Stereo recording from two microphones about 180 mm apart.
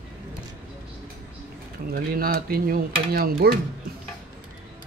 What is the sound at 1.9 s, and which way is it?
Speech, 55° right (ahead or behind).